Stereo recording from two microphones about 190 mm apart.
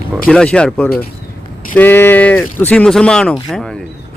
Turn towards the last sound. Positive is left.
turn(degrees=0)  # may be behind; listen again after turning